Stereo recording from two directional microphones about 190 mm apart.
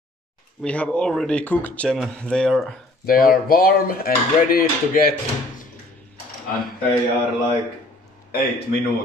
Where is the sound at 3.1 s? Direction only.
50° left (ahead or behind).